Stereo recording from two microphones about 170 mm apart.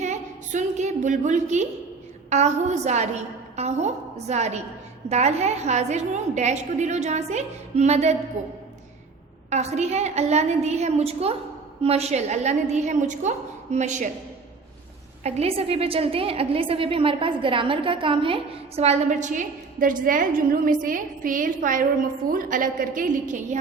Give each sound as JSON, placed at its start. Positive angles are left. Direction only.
{"t": 0.0, "sound": "a woman's voice", "side_deg": -45}
{"t": 9.5, "sound": "a woman's voice", "side_deg": -40}
{"t": 15.2, "sound": "a woman's voice", "side_deg": -35}